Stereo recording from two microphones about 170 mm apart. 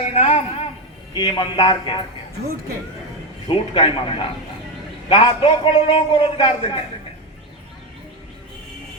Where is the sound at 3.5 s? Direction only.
30° left (ahead or behind).